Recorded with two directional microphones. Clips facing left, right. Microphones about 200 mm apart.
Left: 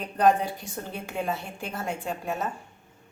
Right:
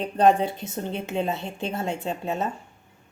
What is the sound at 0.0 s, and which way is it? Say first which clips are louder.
A woman's voice: right 3 dB; 25° right (ahead or behind).